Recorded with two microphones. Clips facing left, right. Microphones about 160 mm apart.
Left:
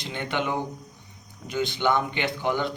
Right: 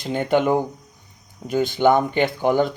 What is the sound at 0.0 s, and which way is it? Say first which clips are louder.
Speech: right 9 dB; 45° right (ahead or behind).